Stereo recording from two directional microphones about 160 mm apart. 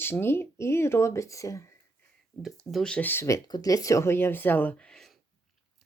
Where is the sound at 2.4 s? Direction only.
Centre (ahead or behind).